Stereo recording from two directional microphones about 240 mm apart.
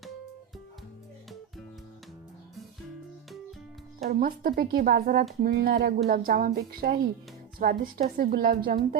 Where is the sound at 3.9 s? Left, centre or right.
Right.